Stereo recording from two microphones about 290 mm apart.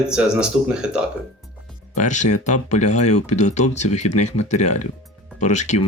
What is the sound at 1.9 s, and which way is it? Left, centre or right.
Speech, left.